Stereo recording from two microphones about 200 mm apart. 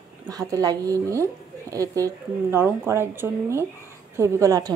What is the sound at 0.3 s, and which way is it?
A woman's voice, 15° right (ahead or behind).